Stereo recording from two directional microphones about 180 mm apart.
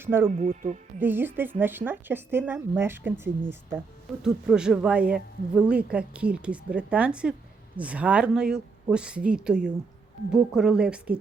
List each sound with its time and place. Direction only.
0.0 s speech: 15° right (ahead or behind)
0.3 s speech: 45° right (ahead or behind)
0.9 s a woman's voice: 10° right (ahead or behind)